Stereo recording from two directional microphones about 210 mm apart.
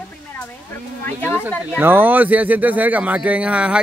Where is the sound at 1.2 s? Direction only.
10° left (ahead or behind).